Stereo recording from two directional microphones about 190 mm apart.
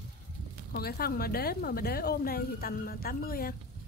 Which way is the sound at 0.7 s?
55° left (ahead or behind).